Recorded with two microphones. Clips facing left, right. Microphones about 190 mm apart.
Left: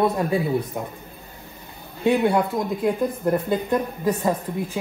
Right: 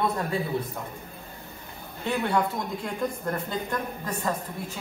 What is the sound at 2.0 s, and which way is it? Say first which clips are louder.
Speech: left 7 dB; 25° left (ahead or behind).